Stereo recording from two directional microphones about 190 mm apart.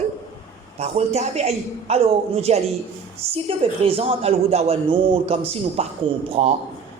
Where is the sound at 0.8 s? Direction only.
35° right (ahead or behind).